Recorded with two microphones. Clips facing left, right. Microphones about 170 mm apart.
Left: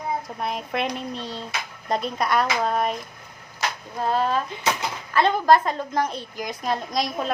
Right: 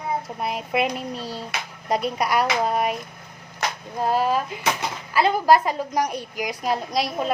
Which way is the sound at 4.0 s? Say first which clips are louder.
Right 1 dB; 10° right (ahead or behind).